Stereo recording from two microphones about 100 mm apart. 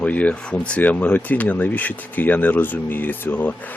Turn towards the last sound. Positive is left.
turn(degrees=20)  # may be behind; listen again after turning